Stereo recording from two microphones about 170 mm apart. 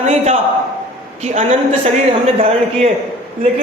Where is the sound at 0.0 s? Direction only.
40° right (ahead or behind).